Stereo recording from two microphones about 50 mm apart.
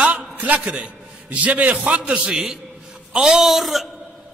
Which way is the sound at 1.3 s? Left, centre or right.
Right.